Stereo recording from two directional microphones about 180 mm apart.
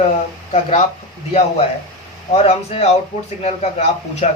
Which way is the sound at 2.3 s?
35° left (ahead or behind).